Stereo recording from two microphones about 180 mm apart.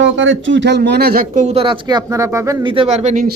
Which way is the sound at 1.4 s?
35° right (ahead or behind).